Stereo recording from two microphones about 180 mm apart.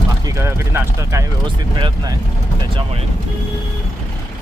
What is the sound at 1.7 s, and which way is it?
Speech, 25° right (ahead or behind).